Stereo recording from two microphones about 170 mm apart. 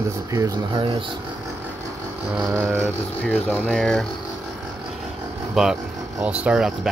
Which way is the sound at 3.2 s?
10° left (ahead or behind).